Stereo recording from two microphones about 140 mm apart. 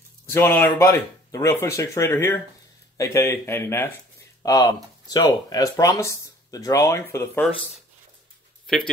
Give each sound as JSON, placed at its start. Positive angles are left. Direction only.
{"t": 0.3, "sound": "speech", "side_deg": 15}
{"t": 8.6, "sound": "speech", "side_deg": 5}